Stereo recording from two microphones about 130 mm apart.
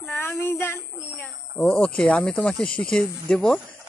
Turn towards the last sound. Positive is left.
turn(degrees=5)  # may be behind; listen again after turning